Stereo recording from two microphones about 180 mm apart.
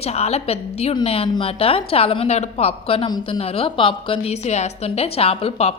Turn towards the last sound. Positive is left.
turn(degrees=35)  # may be behind; listen again after turning